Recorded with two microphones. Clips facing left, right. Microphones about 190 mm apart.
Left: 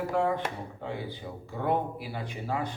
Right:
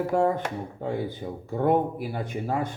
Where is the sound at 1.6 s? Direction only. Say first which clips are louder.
Right 6 dB; 50° right (ahead or behind).